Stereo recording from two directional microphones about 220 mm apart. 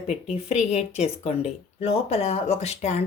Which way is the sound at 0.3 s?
30° left (ahead or behind).